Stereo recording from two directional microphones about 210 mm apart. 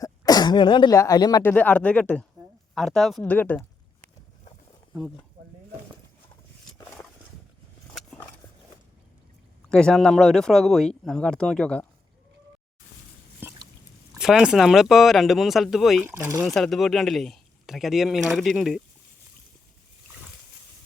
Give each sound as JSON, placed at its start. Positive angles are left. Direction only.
{"t": 0.0, "sound": "speech", "side_deg": 20}
{"t": 7.9, "sound": "a sound", "side_deg": 5}
{"t": 9.6, "sound": "speech", "side_deg": 5}
{"t": 13.4, "sound": "drip", "side_deg": -10}
{"t": 14.1, "sound": "speech", "side_deg": 0}
{"t": 16.5, "sound": "speech", "side_deg": 0}